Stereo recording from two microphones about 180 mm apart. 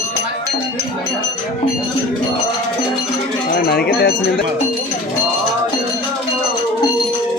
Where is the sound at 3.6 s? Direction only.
60° left (ahead or behind).